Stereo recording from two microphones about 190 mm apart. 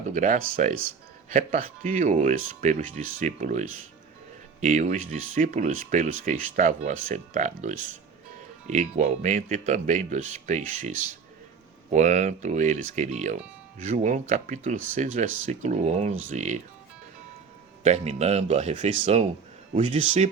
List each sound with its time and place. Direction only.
0.1 s speech: 40° right (ahead or behind)
11.9 s speech: 40° right (ahead or behind)
17.8 s speech: 35° right (ahead or behind)